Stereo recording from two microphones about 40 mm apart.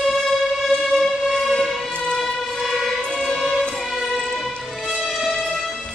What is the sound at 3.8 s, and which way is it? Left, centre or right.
Music, centre.